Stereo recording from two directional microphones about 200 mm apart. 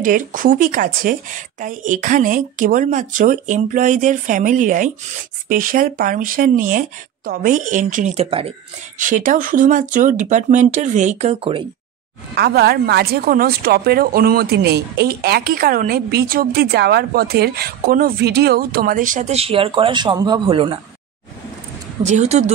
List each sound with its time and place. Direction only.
0.0 s a woman's voice: 45° right (ahead or behind)
8.9 s a woman's voice: 40° right (ahead or behind)
12.4 s speech: 50° right (ahead or behind); by 20.8 s 25° right (ahead or behind)
22.0 s a woman's voice: 35° right (ahead or behind)